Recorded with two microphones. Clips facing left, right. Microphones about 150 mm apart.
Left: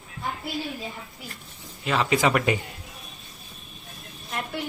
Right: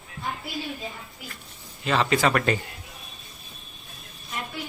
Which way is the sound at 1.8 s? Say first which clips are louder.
Even; 10° left (ahead or behind).